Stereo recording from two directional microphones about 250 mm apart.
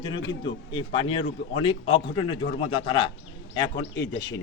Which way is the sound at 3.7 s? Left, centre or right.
Left.